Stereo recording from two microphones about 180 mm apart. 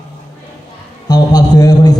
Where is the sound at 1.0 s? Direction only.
20° left (ahead or behind).